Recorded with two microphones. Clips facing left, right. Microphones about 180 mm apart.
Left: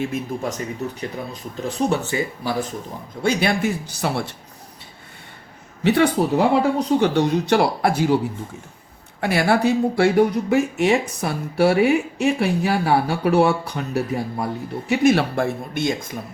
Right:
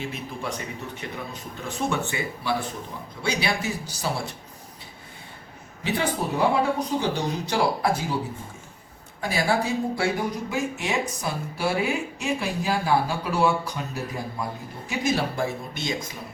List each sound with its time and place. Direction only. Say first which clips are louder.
0.0 s speech: left 7 dB; 45° left (ahead or behind)
3.2 s speech: left 7 dB; 55° left (ahead or behind)
5.8 s speech: left 9 dB; 70° left (ahead or behind)
9.2 s speech: left 6 dB; 65° left (ahead or behind)